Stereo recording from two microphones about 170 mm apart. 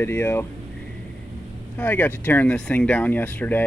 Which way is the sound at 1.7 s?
10° left (ahead or behind).